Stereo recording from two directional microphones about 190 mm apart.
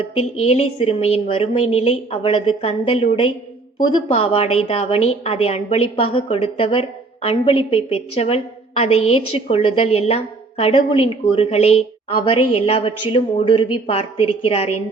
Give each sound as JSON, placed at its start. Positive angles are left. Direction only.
{"t": 0.3, "sound": "a woman's voice", "side_deg": 35}